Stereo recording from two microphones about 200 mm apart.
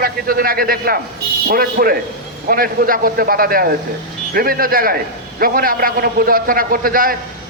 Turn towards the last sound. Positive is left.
turn(degrees=-45)  # may be behind; listen again after turning